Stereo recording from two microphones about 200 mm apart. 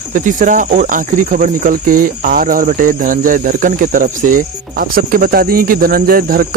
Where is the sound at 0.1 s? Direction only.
40° right (ahead or behind).